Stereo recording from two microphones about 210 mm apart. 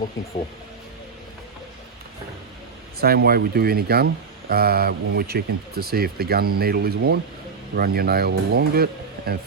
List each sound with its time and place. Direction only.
3.0 s speech: 45° right (ahead or behind)